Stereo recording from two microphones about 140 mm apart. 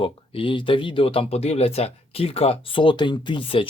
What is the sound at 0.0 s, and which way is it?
Speech, 40° left (ahead or behind).